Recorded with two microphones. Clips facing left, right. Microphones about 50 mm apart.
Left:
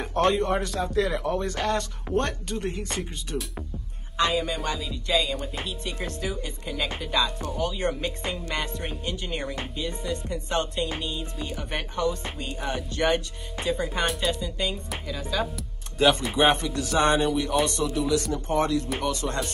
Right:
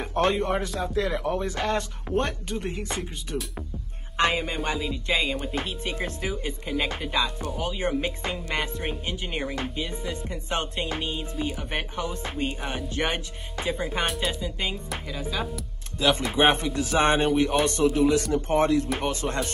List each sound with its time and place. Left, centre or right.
0.0 s speech: centre
4.2 s speech: right
4.6 s speech: centre
4.9 s speech: right
5.5 s speech: right
5.9 s speech: centre
11.3 s speech: centre
14.0 s speech: centre
14.4 s speech: centre
16.3 s speech: right
17.2 s speech: right